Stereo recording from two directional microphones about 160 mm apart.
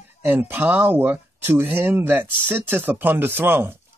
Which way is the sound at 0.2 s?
10° right (ahead or behind).